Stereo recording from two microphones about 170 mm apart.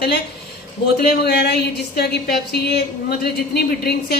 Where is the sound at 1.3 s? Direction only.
75° left (ahead or behind).